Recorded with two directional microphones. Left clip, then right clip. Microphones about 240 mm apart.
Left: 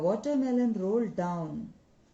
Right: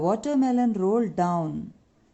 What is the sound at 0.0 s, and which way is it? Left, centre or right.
Speech, right.